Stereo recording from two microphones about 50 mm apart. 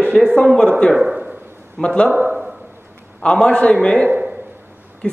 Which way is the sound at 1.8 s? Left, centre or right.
Left.